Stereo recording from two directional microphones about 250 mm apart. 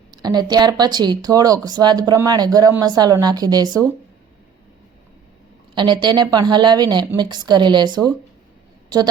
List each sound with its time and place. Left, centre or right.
0.2 s speech: centre
5.7 s speech: centre